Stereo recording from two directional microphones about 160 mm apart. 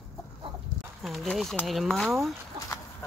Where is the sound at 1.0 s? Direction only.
Centre (ahead or behind).